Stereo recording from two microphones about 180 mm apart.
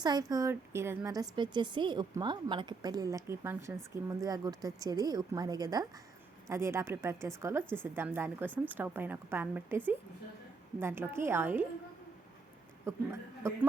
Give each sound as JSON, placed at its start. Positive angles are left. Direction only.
{"t": 0.0, "sound": "a woman's voice", "side_deg": -20}
{"t": 7.6, "sound": "a woman's voice", "side_deg": 5}
{"t": 7.9, "sound": "a woman's voice", "side_deg": -10}
{"t": 12.8, "sound": "a woman's voice", "side_deg": -15}